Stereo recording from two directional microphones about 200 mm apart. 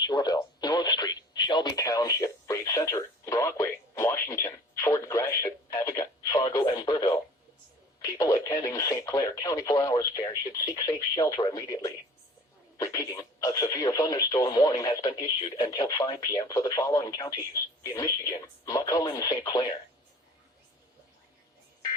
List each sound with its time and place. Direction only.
0.0 s radio: 20° left (ahead or behind)